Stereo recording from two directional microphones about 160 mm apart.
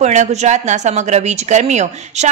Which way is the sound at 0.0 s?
45° right (ahead or behind).